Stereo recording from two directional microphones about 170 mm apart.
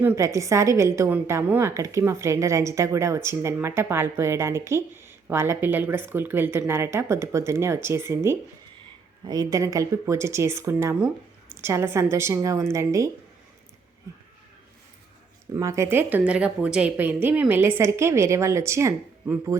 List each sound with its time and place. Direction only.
0.0 s a woman's voice: 10° right (ahead or behind)
15.5 s a woman's voice: 15° right (ahead or behind)